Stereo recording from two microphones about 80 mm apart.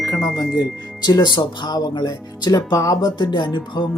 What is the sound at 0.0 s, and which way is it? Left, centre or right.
Music, left.